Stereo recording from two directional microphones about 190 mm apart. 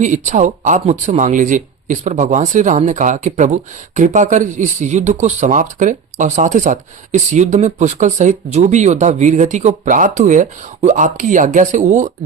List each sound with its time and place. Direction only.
0.0 s speech: 40° right (ahead or behind)